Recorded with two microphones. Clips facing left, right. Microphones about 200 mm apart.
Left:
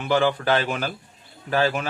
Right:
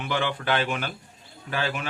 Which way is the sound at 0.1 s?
40° left (ahead or behind).